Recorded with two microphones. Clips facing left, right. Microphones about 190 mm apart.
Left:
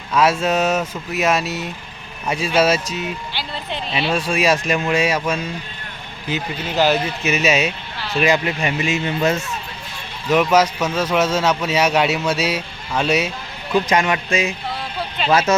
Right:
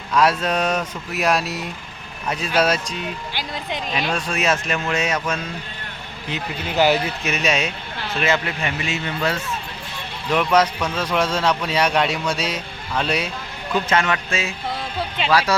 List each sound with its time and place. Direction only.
0.1 s a man's voice: 5° left (ahead or behind)
4.1 s a man's voice: 10° left (ahead or behind)
6.7 s speech: 15° right (ahead or behind)
7.3 s a man's voice: 5° left (ahead or behind)
10.2 s a man's voice: 5° left (ahead or behind); by 15.5 s 20° left (ahead or behind)